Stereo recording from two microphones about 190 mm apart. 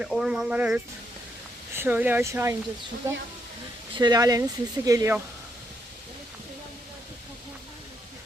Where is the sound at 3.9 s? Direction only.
20° right (ahead or behind).